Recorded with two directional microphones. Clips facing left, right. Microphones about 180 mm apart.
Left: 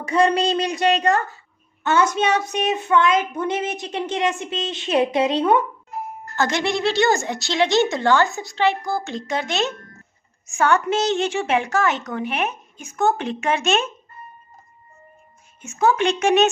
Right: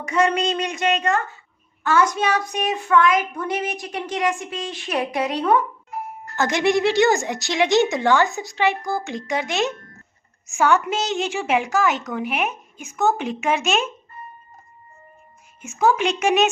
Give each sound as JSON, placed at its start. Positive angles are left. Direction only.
{"t": 0.0, "sound": "a woman's voice", "side_deg": 30}
{"t": 1.8, "sound": "a woman's voice", "side_deg": 25}
{"t": 6.3, "sound": "a woman's voice", "side_deg": -15}
{"t": 15.8, "sound": "a woman's voice", "side_deg": -10}